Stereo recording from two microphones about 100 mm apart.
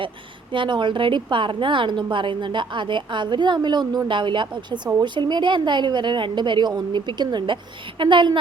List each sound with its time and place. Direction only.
0.5 s a woman's voice: 55° right (ahead or behind)